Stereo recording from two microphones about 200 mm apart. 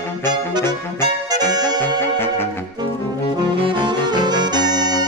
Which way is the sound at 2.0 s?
10° left (ahead or behind).